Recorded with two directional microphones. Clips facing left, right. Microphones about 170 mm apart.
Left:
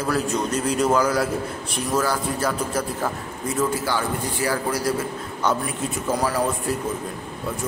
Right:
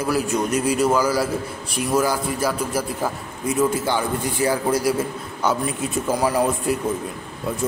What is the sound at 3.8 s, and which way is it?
Speech, 20° right (ahead or behind).